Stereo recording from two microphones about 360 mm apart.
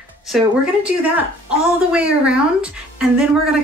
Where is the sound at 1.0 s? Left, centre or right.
Centre.